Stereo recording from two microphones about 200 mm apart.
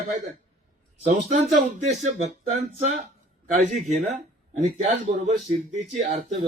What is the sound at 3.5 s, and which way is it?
A man's voice, 35° right (ahead or behind).